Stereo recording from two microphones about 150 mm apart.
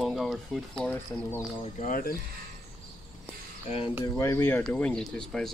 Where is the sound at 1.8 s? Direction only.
70° left (ahead or behind).